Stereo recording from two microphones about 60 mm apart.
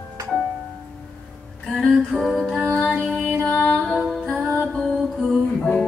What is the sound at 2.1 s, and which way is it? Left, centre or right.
Music, centre.